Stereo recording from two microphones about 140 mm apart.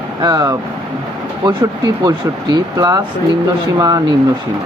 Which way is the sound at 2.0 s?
25° right (ahead or behind).